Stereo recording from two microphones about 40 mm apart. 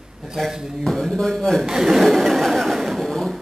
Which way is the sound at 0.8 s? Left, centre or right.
Centre.